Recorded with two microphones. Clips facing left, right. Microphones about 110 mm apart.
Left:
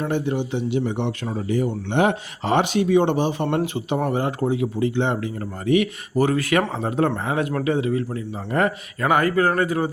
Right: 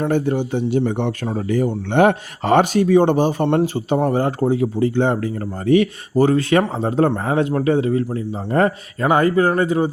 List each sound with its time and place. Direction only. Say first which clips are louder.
0.1 s speech: right 4 dB; 45° right (ahead or behind); by 9.9 s 25° right (ahead or behind)